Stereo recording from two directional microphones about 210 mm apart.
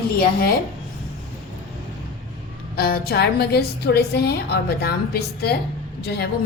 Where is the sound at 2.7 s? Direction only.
45° left (ahead or behind).